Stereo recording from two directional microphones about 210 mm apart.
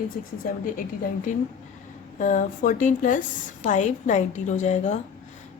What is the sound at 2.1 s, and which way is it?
A woman's voice, 35° left (ahead or behind).